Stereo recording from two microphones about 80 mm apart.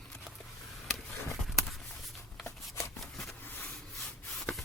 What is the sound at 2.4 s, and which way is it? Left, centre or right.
Shuffling cards, centre.